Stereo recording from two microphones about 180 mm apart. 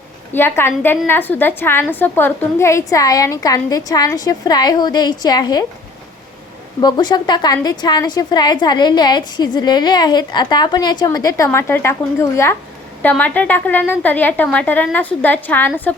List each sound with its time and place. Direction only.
0.3 s a woman's voice: 10° left (ahead or behind)
6.8 s a woman's voice: 25° left (ahead or behind)